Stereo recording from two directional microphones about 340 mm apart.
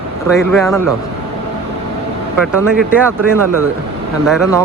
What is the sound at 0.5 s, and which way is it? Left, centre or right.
Speech, centre.